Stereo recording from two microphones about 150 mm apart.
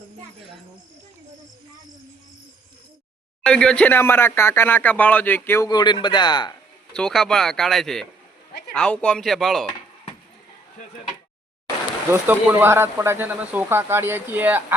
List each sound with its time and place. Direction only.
3.4 s speech: 5° left (ahead or behind)
5.6 s speech: 30° left (ahead or behind)
6.9 s speech: 5° left (ahead or behind)
12.1 s speech: 15° right (ahead or behind)